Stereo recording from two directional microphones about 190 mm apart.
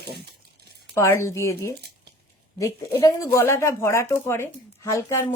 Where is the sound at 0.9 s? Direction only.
15° left (ahead or behind).